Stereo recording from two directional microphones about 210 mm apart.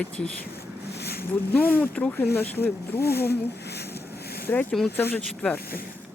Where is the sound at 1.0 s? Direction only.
50° left (ahead or behind).